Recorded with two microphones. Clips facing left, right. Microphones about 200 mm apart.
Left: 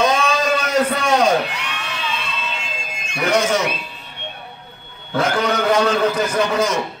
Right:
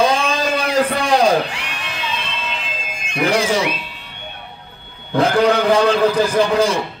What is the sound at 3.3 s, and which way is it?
Speech, 30° right (ahead or behind).